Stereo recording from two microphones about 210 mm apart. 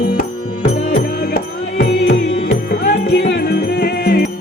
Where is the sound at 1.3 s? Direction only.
50° left (ahead or behind).